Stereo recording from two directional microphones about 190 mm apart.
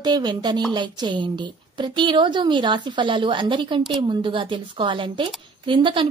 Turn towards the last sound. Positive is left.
turn(degrees=-25)  # may be behind; listen again after turning